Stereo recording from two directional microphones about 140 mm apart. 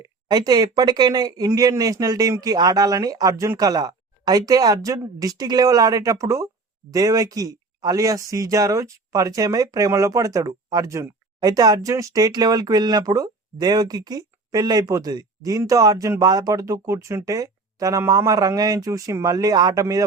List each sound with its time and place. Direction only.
0.0 s speech: 30° right (ahead or behind)